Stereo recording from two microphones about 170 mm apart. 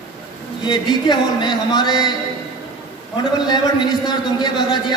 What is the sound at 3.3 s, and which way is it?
Speech, 25° left (ahead or behind).